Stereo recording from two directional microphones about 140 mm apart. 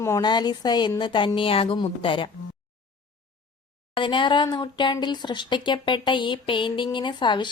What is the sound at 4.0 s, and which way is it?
Speech, 35° left (ahead or behind).